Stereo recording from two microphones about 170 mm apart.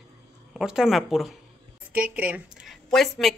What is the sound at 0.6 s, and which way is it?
A woman's voice, 5° right (ahead or behind).